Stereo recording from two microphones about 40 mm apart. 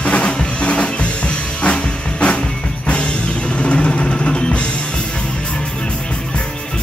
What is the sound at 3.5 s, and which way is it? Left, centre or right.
Music, left.